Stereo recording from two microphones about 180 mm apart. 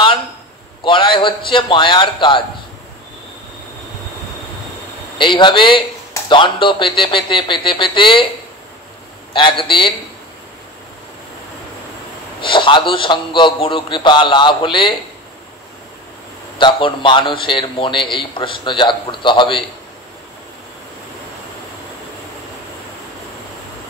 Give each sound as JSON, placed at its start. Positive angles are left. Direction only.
{"t": 0.8, "sound": "a man's voice", "side_deg": 25}
{"t": 5.2, "sound": "a man's voice", "side_deg": 25}
{"t": 9.3, "sound": "a man's voice", "side_deg": 25}
{"t": 12.4, "sound": "a man's voice", "side_deg": 30}
{"t": 16.5, "sound": "a man's voice", "side_deg": 25}